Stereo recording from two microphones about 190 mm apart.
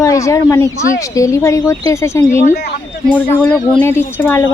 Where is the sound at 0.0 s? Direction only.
15° left (ahead or behind).